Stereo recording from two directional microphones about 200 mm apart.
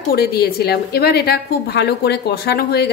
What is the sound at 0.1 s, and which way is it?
A woman's voice, 50° left (ahead or behind).